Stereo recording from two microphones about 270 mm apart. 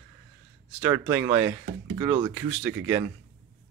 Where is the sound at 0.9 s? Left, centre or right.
Centre.